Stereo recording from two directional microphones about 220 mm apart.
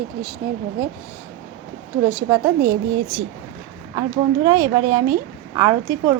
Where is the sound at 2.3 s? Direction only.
10° right (ahead or behind).